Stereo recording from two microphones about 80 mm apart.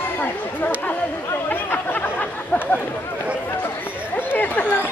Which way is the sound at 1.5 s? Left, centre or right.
Left.